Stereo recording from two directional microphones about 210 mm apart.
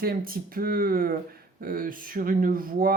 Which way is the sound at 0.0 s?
45° right (ahead or behind).